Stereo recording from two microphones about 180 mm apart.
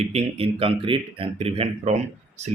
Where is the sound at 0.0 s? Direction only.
35° right (ahead or behind).